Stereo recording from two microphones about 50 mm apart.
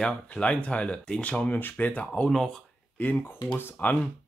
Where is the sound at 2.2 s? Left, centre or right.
Centre.